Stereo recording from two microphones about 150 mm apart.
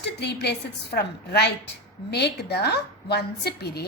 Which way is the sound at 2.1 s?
90° left.